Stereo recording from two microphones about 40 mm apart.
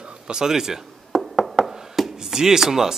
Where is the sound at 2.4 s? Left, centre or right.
Centre.